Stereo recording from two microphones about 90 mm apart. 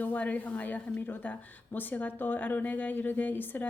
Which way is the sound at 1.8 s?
20° left (ahead or behind).